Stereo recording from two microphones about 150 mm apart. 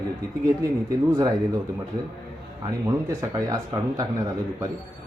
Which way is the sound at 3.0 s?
25° right (ahead or behind).